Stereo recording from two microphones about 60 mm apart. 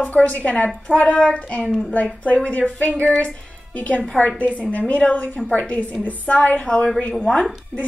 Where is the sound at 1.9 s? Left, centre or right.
Left.